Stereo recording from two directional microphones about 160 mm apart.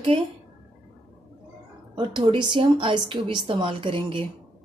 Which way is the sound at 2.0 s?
30° right (ahead or behind).